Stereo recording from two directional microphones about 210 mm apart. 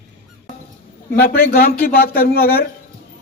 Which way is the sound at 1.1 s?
45° left (ahead or behind).